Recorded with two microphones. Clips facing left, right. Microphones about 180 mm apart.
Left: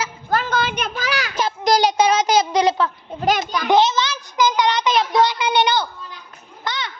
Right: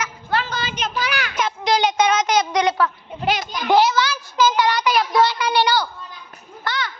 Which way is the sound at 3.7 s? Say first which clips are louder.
Even; 20° left (ahead or behind).